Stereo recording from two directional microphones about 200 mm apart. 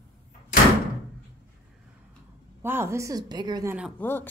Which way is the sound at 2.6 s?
10° right (ahead or behind).